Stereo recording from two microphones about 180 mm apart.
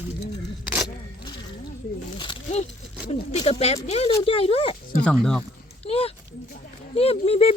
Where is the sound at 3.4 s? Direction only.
35° left (ahead or behind).